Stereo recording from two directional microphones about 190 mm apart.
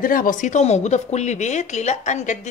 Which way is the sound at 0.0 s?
45° left (ahead or behind).